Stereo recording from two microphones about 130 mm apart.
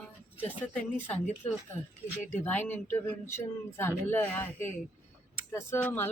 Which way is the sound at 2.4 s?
15° left (ahead or behind).